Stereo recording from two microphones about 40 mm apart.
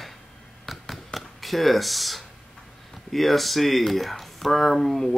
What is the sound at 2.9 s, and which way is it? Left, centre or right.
Speech, centre.